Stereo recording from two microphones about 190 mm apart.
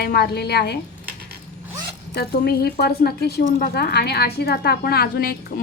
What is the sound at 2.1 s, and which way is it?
A woman's voice, 55° left (ahead or behind).